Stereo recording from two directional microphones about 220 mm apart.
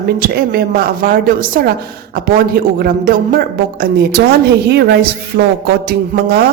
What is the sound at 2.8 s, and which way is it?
A woman's voice, 45° right (ahead or behind).